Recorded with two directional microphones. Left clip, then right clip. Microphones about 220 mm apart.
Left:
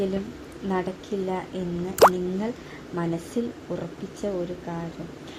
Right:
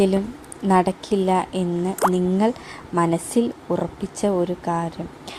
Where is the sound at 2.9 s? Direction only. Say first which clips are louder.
Right 9 dB; 25° right (ahead or behind).